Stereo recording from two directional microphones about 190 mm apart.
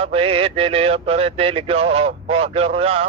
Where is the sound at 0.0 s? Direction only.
30° right (ahead or behind).